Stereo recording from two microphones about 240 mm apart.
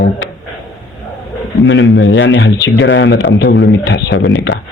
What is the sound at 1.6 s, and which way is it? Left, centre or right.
Speech, left.